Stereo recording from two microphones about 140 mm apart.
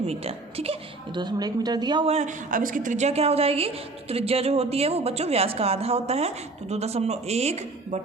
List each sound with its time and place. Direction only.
0.1 s a woman's voice: 45° right (ahead or behind)
1.2 s speech: 30° right (ahead or behind)
2.0 s a woman's voice: 55° right (ahead or behind)